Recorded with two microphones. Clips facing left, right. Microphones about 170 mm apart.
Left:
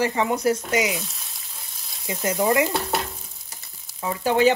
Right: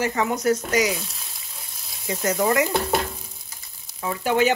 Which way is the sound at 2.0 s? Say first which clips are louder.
Even; 25° left (ahead or behind).